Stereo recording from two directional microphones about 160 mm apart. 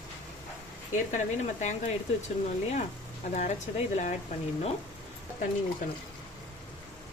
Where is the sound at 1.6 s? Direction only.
45° left (ahead or behind).